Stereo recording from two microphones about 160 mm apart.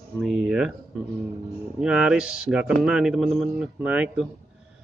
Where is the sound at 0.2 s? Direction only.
Centre (ahead or behind).